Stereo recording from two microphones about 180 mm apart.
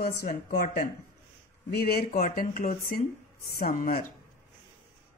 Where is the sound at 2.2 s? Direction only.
45° left (ahead or behind).